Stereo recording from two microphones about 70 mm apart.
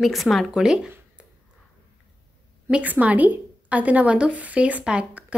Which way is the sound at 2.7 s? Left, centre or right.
Right.